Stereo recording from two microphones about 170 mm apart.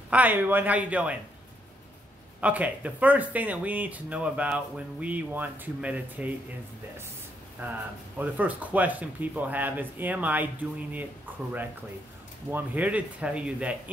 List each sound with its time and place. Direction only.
0.1 s speech: 10° right (ahead or behind)
2.4 s speech: 10° right (ahead or behind)
7.6 s speech: 10° right (ahead or behind)
12.4 s speech: 10° right (ahead or behind)